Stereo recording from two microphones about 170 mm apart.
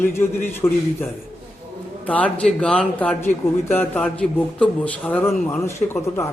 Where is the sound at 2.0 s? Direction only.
10° left (ahead or behind).